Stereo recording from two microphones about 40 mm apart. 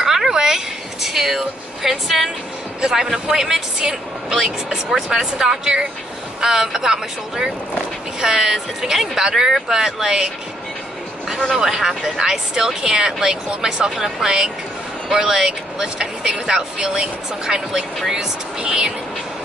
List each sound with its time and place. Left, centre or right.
0.0 s a sound: centre
1.0 s speech: centre
11.5 s speech: centre